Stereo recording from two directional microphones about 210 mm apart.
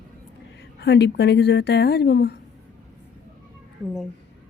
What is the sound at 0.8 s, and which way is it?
Speech, 55° left (ahead or behind).